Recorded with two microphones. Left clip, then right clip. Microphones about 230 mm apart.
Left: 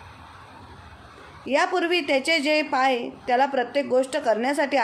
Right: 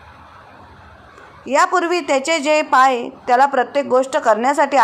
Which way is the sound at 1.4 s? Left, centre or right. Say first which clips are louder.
Right 7 dB; centre.